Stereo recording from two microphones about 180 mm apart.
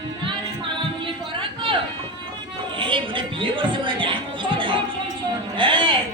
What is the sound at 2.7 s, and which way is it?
Music, 30° right (ahead or behind).